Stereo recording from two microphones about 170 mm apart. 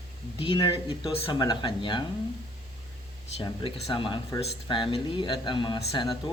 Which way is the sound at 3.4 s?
30° left (ahead or behind).